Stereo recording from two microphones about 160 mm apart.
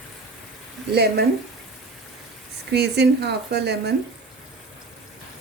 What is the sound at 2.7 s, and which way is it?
Speech, 90° right.